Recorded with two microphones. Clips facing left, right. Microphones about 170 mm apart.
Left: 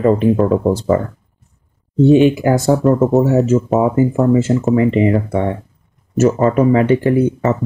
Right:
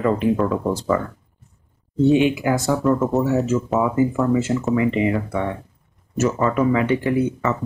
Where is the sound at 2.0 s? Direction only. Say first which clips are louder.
Left 6 dB; 35° left (ahead or behind).